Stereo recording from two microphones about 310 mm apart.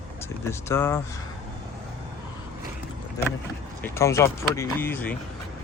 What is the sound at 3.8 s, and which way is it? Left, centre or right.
Speech, centre.